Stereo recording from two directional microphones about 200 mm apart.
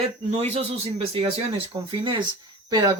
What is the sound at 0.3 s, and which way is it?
Speech, 30° right (ahead or behind).